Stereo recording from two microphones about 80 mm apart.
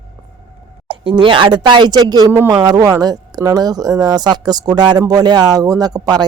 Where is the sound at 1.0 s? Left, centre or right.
Right.